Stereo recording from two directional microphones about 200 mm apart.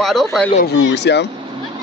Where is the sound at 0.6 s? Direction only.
60° left (ahead or behind).